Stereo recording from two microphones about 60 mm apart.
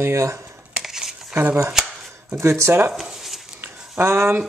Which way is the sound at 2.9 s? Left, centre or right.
Centre.